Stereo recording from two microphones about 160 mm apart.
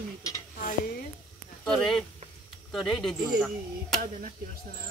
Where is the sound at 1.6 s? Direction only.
5° left (ahead or behind).